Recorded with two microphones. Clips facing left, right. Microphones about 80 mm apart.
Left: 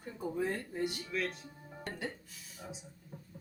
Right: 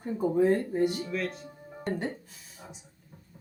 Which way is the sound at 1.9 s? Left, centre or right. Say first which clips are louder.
Right 9 dB; right.